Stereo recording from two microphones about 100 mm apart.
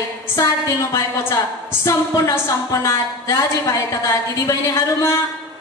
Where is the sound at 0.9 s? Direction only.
30° left (ahead or behind).